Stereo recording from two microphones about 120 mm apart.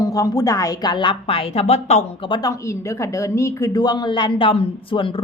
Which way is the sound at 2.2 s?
40° left (ahead or behind).